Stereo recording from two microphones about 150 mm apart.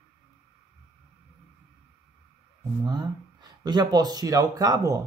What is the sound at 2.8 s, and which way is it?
Speech, 30° right (ahead or behind).